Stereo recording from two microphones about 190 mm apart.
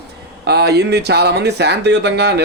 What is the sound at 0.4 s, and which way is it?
A man's voice, 60° right (ahead or behind).